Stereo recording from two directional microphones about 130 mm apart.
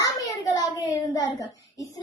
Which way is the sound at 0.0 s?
25° left (ahead or behind).